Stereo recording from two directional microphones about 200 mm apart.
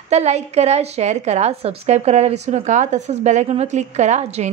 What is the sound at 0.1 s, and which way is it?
A woman's voice, 35° right (ahead or behind).